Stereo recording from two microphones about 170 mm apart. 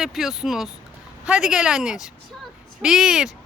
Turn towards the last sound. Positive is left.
turn(degrees=0)  # may be behind; listen again after turning